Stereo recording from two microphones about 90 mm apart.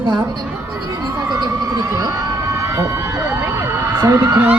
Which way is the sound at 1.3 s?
45° right (ahead or behind).